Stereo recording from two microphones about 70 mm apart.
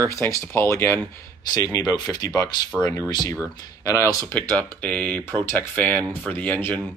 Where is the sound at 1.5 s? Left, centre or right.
Left.